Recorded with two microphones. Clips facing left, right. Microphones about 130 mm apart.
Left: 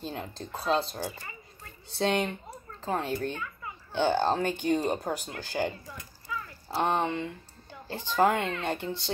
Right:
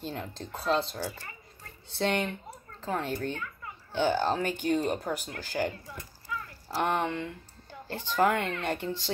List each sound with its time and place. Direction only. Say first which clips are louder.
0.0 s speech: even; 15° left (ahead or behind)